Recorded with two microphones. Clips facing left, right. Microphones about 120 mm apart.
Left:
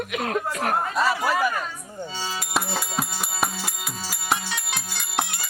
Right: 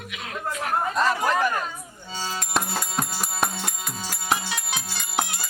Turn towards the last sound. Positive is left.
turn(degrees=0)  # may be behind; listen again after turning